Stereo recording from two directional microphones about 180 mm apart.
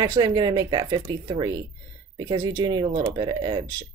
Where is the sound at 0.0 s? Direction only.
20° right (ahead or behind).